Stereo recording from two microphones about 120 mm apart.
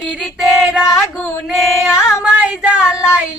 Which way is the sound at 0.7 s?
5° right (ahead or behind).